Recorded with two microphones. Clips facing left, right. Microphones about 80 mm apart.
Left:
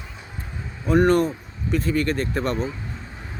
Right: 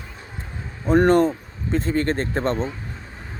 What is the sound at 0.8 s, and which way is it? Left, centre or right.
Speech, right.